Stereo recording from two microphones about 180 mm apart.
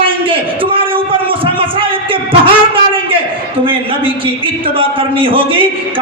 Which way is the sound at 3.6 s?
30° right (ahead or behind).